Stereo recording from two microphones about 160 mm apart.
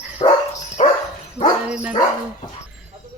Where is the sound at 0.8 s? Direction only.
45° left (ahead or behind).